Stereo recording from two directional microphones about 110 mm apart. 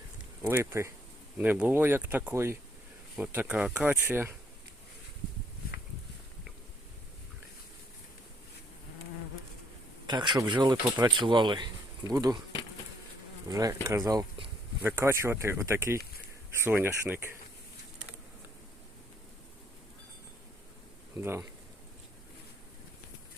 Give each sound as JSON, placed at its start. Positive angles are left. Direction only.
{"t": 0.4, "sound": "speech", "side_deg": -20}
{"t": 10.1, "sound": "speech", "side_deg": -45}
{"t": 13.5, "sound": "speech", "side_deg": -35}
{"t": 21.2, "sound": "speech", "side_deg": -20}